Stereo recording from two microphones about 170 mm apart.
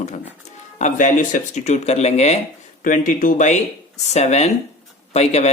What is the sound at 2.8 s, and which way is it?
Speech, 50° left (ahead or behind).